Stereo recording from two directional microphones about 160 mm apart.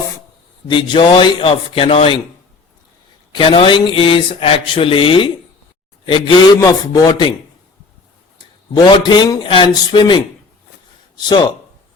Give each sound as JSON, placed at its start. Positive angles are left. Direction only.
{"t": 0.7, "sound": "speech", "side_deg": 30}
{"t": 3.3, "sound": "a man's voice", "side_deg": 35}
{"t": 8.7, "sound": "a man's voice", "side_deg": 30}
{"t": 11.3, "sound": "a man's voice", "side_deg": 25}